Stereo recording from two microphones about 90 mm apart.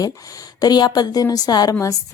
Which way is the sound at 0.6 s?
45° left (ahead or behind).